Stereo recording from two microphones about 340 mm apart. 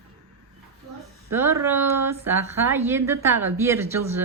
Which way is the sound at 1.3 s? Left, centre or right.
Centre.